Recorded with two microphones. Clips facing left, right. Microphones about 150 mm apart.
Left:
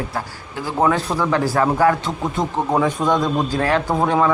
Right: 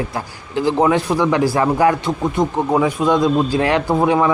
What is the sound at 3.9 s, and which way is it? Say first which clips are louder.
Speech: right 3 dB; 5° right (ahead or behind).